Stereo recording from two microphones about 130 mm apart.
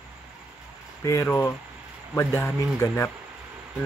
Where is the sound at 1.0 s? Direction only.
25° left (ahead or behind).